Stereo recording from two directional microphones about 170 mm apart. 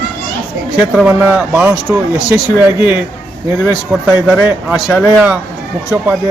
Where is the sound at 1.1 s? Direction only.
10° right (ahead or behind).